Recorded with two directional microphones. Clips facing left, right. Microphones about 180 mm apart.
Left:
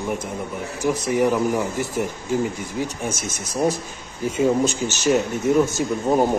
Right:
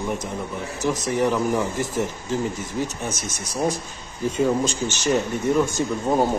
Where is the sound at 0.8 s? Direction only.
10° left (ahead or behind).